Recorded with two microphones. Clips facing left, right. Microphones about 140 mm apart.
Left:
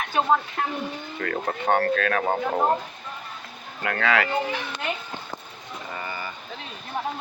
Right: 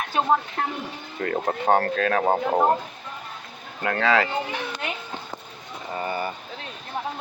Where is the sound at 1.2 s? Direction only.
25° right (ahead or behind).